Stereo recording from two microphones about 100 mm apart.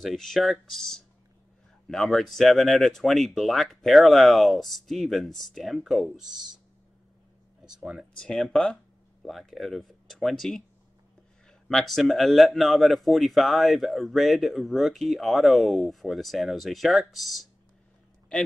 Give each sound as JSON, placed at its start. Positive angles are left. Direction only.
{"t": 0.0, "sound": "speech", "side_deg": 0}
{"t": 7.8, "sound": "speech", "side_deg": -5}
{"t": 8.2, "sound": "speech", "side_deg": 5}